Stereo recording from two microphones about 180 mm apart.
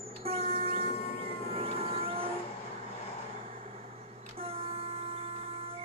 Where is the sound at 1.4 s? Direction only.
35° right (ahead or behind).